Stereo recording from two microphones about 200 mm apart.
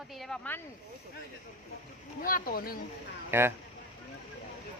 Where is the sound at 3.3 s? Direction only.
10° right (ahead or behind).